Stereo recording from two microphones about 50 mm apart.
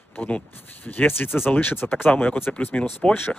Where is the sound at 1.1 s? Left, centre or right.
Left.